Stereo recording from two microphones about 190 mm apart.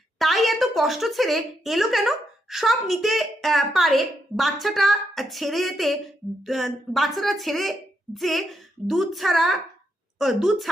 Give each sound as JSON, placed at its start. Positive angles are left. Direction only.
{"t": 0.2, "sound": "a woman's voice", "side_deg": 0}